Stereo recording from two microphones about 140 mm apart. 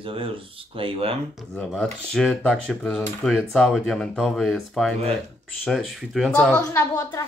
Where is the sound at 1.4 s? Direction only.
5° left (ahead or behind).